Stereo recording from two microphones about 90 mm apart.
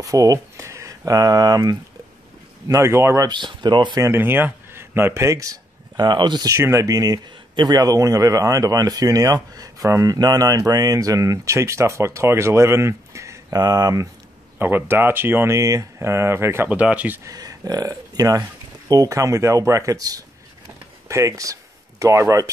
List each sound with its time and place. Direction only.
0.0 s speech: 40° right (ahead or behind)
2.7 s speech: 30° right (ahead or behind)
3.3 s speech: 60° right (ahead or behind)
4.0 s speech: 25° right (ahead or behind); by 6.5 s 55° right (ahead or behind)
6.5 s speech: 35° right (ahead or behind)
13.6 s speech: 45° right (ahead or behind)
14.6 s speech: 25° right (ahead or behind)
15.5 s speech: 35° right (ahead or behind)
16.6 s speech: 15° right (ahead or behind)
17.2 s speech: 45° right (ahead or behind)